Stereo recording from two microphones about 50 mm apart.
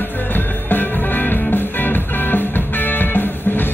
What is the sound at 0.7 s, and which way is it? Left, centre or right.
Music, left.